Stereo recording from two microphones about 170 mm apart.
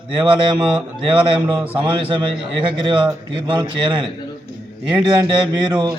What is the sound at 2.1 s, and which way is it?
A man's voice, 30° right (ahead or behind).